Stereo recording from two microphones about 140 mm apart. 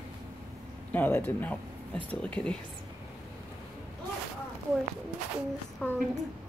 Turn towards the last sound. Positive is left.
turn(degrees=5)  # may be behind; listen again after turning